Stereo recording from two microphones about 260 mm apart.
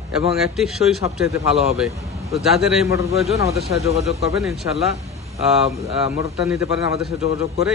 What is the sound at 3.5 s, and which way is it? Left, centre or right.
Speech, right.